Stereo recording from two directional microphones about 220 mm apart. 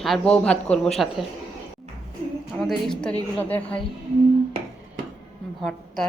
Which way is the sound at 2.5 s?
Centre (ahead or behind).